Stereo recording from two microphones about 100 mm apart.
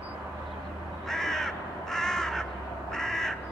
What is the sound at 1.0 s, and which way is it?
Crow, 5° left (ahead or behind).